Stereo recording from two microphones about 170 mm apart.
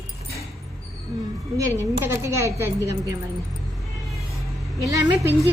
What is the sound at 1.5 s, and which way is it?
A woman's voice, 15° right (ahead or behind).